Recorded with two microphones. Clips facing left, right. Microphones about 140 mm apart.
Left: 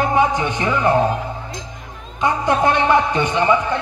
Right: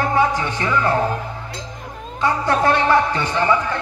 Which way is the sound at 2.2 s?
20° left (ahead or behind).